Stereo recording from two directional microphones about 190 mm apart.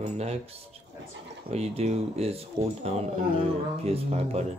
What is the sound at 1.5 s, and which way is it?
Speech, 35° right (ahead or behind).